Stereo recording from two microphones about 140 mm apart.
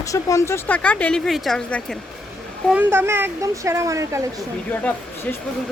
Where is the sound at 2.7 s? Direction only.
15° right (ahead or behind).